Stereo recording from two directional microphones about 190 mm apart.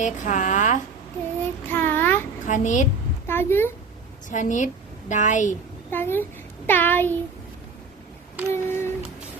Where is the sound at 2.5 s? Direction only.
40° left (ahead or behind).